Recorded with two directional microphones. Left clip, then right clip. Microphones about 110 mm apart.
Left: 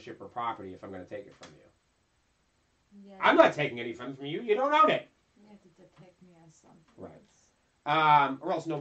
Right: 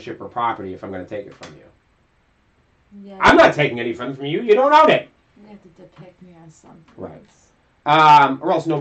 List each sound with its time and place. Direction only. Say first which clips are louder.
0.0 s speech: right 13 dB; 15° left (ahead or behind)
3.2 s speech: right 10 dB; 10° left (ahead or behind)
5.4 s a woman's voice: right 13 dB; 5° left (ahead or behind)
7.8 s speech: right 12 dB; 15° left (ahead or behind)